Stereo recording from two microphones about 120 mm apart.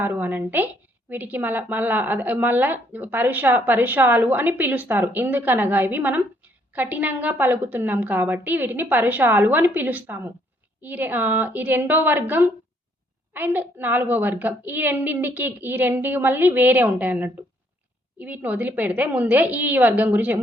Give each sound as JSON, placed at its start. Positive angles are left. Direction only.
{"t": 0.0, "sound": "speech", "side_deg": -15}